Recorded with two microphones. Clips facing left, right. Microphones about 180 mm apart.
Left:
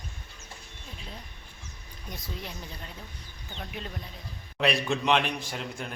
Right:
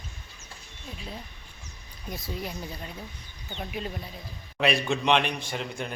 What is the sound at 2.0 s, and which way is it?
Speech, 5° right (ahead or behind).